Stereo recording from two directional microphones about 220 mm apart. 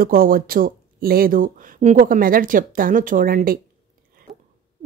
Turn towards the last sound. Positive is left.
turn(degrees=-40)  # may be behind; listen again after turning